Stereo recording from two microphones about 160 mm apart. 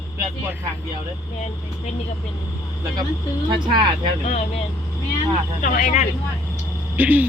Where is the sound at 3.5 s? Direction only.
30° right (ahead or behind).